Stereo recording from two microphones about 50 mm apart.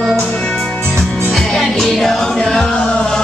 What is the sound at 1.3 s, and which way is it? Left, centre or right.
Music, centre.